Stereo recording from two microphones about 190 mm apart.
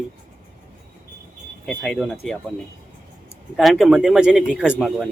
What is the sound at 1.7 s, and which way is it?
Speech, 5° left (ahead or behind).